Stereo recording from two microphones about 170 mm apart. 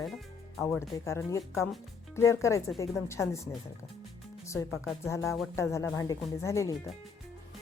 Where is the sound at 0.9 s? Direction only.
15° left (ahead or behind).